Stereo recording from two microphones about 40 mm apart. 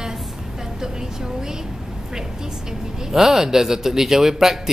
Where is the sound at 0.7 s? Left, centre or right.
Centre.